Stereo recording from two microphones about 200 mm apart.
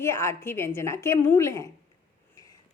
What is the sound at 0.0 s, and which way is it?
A woman's voice, 15° left (ahead or behind).